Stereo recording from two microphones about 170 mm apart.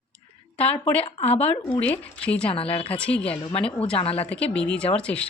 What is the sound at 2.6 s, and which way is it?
Speech, 35° left (ahead or behind).